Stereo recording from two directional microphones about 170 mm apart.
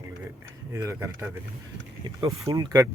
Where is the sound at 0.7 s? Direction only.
15° right (ahead or behind).